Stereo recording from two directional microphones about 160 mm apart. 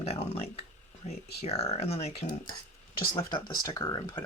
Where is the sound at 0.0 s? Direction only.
40° left (ahead or behind).